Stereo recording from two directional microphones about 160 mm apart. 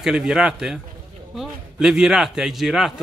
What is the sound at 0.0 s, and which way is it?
A man's voice, 5° right (ahead or behind).